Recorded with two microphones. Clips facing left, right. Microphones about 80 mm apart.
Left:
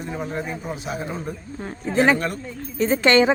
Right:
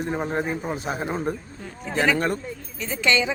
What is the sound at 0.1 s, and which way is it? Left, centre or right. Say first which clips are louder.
Speech: right 1 dB; right.